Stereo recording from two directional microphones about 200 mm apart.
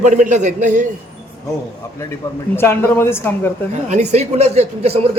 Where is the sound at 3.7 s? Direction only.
35° right (ahead or behind).